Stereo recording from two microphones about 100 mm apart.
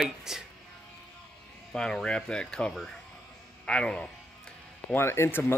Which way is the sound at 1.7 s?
5° left (ahead or behind).